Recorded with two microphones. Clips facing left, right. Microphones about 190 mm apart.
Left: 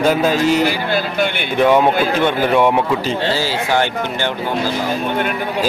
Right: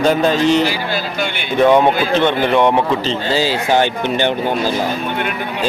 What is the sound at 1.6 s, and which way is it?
A man's voice, 5° left (ahead or behind).